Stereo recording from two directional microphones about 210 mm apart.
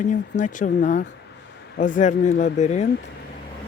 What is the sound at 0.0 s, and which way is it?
Speech, 35° left (ahead or behind).